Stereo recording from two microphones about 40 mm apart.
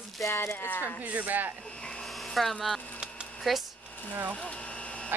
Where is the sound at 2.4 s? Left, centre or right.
Centre.